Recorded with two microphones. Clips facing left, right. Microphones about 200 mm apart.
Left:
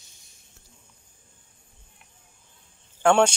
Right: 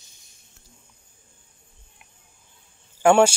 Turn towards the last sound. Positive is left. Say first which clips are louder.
# right 3 dB
turn(degrees=-10)  # may be behind; listen again after turning